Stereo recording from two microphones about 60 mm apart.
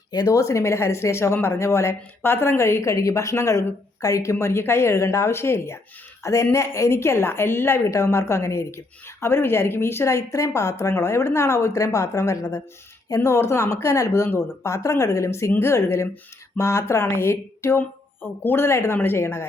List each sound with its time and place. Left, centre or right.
0.2 s a woman's voice: left
7.9 s a woman's voice: left